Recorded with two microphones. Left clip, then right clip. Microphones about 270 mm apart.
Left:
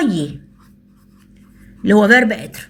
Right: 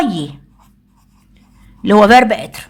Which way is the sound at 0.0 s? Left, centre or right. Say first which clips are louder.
Right 1 dB; centre.